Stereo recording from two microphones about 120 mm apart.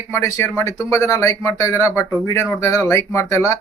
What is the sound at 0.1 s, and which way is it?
Speech, 25° left (ahead or behind).